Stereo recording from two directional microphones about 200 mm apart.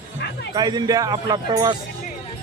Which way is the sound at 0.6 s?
20° right (ahead or behind).